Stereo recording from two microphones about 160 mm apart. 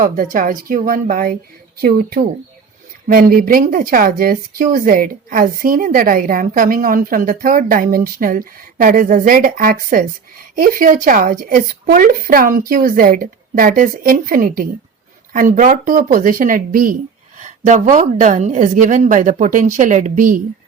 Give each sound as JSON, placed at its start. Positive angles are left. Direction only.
{"t": 0.0, "sound": "speech", "side_deg": -60}
{"t": 17.4, "sound": "speech", "side_deg": -50}